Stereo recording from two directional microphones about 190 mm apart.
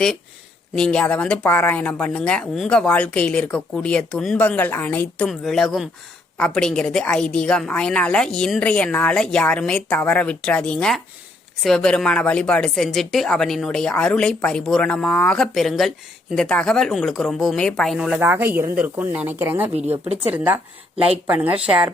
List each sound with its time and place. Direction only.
0.8 s speech: 5° left (ahead or behind)